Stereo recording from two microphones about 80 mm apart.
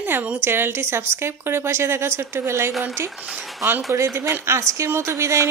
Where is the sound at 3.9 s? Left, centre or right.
Right.